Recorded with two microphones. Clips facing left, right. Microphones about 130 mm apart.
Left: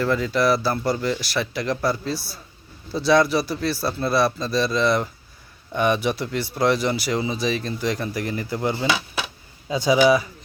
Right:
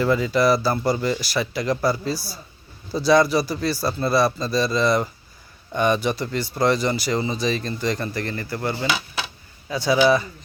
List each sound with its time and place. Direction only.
0.0 s speech: 5° right (ahead or behind)